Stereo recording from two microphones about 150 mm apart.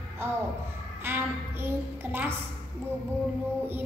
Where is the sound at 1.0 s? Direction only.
15° right (ahead or behind).